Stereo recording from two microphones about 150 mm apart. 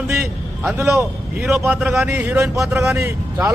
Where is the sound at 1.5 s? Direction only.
10° right (ahead or behind).